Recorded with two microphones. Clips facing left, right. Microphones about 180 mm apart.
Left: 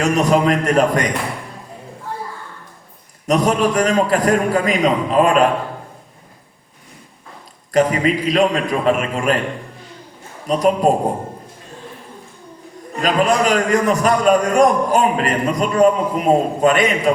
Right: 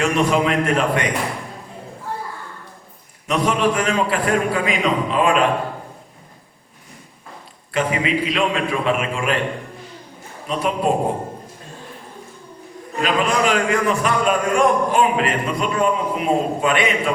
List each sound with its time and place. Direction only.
0.0 s a man's voice: 40° left (ahead or behind)
3.2 s a man's voice: 40° left (ahead or behind)
7.7 s a man's voice: 40° left (ahead or behind)
10.4 s a man's voice: 40° left (ahead or behind)
13.0 s a man's voice: 40° left (ahead or behind)